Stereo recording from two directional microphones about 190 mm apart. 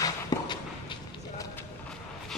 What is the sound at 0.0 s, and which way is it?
Walk, 20° left (ahead or behind).